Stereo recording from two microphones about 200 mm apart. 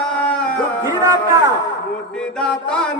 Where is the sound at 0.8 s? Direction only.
15° right (ahead or behind).